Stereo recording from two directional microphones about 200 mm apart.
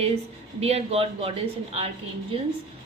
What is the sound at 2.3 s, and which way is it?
Speech, 25° right (ahead or behind).